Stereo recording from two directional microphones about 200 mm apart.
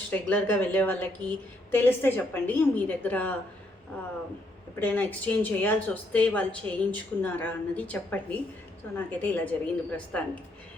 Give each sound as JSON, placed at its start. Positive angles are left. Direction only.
{"t": 0.1, "sound": "speech", "side_deg": 10}
{"t": 4.8, "sound": "speech", "side_deg": 10}